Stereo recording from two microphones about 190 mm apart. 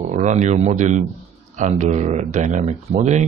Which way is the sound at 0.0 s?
40° right (ahead or behind).